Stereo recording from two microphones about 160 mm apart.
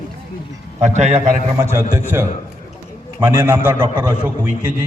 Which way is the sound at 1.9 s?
15° right (ahead or behind).